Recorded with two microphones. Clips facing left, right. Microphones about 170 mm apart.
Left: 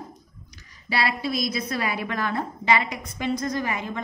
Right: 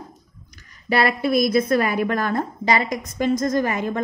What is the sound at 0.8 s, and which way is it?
A woman's voice, 55° right (ahead or behind).